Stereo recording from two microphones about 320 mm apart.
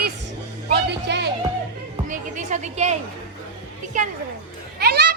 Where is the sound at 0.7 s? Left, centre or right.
Right.